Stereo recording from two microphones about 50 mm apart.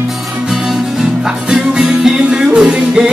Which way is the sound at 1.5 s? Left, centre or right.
Centre.